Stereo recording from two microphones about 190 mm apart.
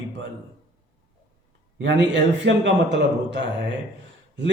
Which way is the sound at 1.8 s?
70° right (ahead or behind).